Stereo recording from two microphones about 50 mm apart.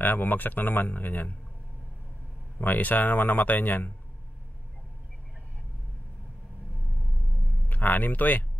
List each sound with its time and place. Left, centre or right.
0.0 s speech: left
2.6 s speech: left
7.6 s speech: left